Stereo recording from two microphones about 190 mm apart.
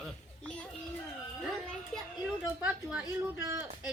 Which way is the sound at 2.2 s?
5° right (ahead or behind).